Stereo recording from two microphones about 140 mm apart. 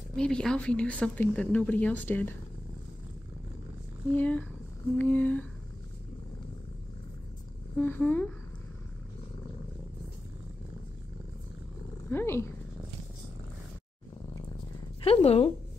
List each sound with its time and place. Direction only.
0.1 s speech: 5° left (ahead or behind)
4.2 s speech: 10° left (ahead or behind)
7.7 s speech: 15° left (ahead or behind)
12.1 s speech: 15° left (ahead or behind)
15.0 s speech: 50° left (ahead or behind)